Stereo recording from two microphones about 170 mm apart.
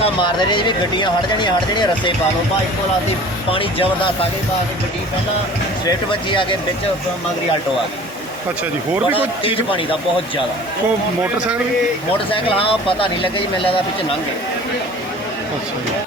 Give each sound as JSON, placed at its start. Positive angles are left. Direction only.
{"t": 0.0, "sound": "speech", "side_deg": 30}
{"t": 3.5, "sound": "speech", "side_deg": 30}
{"t": 6.1, "sound": "speech", "side_deg": 30}
{"t": 9.1, "sound": "speech", "side_deg": 30}
{"t": 12.3, "sound": "speech", "side_deg": 30}